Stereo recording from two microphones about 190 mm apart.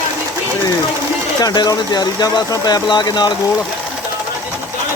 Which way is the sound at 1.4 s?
20° left (ahead or behind).